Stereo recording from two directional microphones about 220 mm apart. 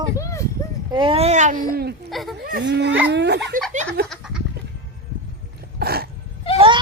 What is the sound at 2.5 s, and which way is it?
Speech, 45° right (ahead or behind).